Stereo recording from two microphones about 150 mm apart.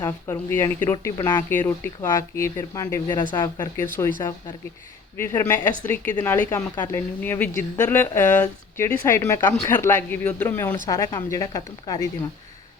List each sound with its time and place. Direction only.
0.0 s speech: 15° left (ahead or behind)